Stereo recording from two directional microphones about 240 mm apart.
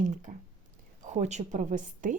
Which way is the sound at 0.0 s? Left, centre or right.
Right.